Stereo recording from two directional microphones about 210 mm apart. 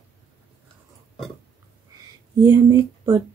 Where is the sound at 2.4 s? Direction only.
20° right (ahead or behind).